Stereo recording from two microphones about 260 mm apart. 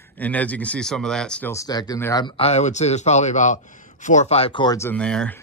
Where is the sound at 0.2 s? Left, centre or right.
Centre.